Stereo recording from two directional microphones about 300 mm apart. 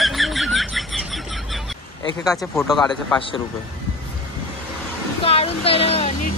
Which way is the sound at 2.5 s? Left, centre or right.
Centre.